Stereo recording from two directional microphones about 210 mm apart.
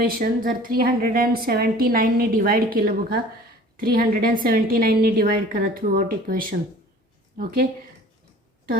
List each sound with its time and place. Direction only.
0.0 s a woman's voice: 45° right (ahead or behind)